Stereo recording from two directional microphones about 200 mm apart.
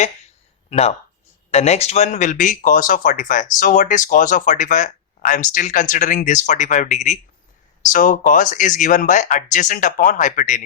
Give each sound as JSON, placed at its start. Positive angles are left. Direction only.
{"t": 0.7, "sound": "speech", "side_deg": 30}